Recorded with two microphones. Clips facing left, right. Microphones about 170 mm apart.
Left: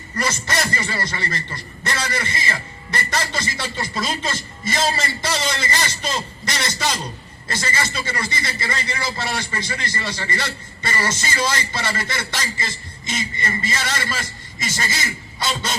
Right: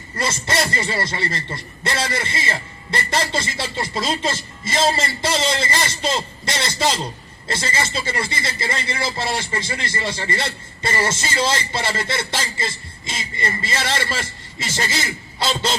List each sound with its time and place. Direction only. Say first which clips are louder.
0.2 s a man's voice: right 1 dB; 25° right (ahead or behind)
13.7 s a man's voice: right 3 dB; 30° right (ahead or behind)